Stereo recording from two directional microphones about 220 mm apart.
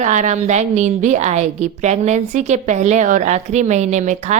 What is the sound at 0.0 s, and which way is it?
Speech, 35° right (ahead or behind).